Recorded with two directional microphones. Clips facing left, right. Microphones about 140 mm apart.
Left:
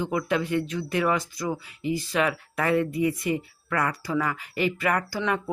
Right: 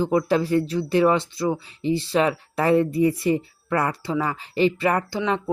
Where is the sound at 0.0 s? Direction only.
35° right (ahead or behind).